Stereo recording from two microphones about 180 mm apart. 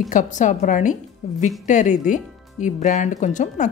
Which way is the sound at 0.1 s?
45° left (ahead or behind).